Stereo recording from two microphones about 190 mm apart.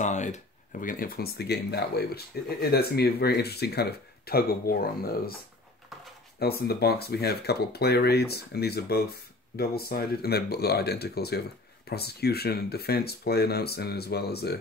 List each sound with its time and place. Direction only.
0.0 s speech: 40° left (ahead or behind)
6.4 s speech: 55° left (ahead or behind)